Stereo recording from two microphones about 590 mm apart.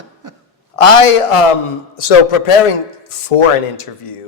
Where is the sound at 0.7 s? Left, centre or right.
Left.